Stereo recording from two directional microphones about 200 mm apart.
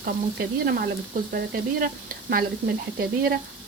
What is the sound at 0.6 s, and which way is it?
Speech, 50° right (ahead or behind).